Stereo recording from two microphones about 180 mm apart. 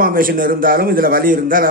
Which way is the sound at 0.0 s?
55° right (ahead or behind).